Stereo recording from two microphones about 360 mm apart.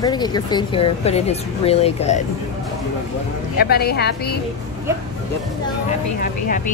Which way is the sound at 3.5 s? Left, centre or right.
Left.